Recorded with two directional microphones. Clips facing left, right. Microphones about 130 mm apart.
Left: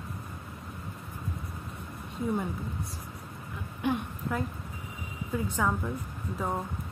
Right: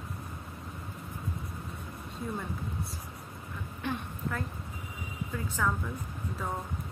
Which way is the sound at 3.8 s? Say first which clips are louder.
Left 6 dB; 15° left (ahead or behind).